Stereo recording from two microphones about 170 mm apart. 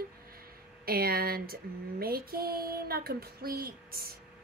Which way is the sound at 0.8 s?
60° right (ahead or behind).